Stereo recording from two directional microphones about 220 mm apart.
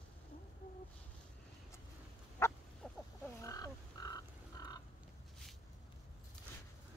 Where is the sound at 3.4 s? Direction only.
15° left (ahead or behind).